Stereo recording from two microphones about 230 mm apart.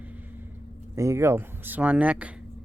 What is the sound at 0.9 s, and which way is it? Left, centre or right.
Speech, centre.